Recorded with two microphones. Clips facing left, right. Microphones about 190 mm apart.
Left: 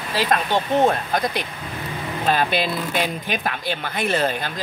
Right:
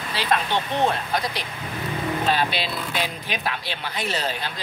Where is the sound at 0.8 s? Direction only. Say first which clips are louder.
Left 4 dB; 50° left (ahead or behind).